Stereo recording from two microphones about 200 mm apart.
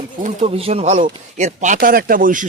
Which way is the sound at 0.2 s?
35° right (ahead or behind).